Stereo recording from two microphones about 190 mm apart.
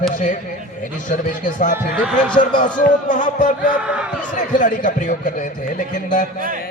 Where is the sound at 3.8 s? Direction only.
5° right (ahead or behind).